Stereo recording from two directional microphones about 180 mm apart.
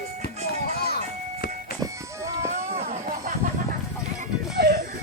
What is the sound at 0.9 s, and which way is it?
Music, 60° left (ahead or behind).